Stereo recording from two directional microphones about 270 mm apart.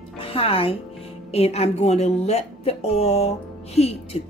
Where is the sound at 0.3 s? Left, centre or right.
Left.